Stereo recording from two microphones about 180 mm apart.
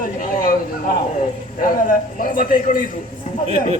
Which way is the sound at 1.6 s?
50° left (ahead or behind).